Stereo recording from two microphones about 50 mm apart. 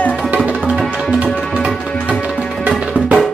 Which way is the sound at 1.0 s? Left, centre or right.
Centre.